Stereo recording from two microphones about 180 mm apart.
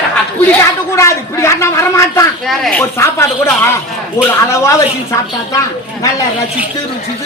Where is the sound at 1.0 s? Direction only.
15° left (ahead or behind).